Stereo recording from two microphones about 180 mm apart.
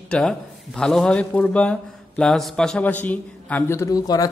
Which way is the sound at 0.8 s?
5° left (ahead or behind).